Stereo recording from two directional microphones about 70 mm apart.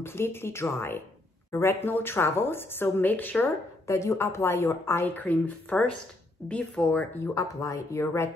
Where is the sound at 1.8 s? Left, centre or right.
Left.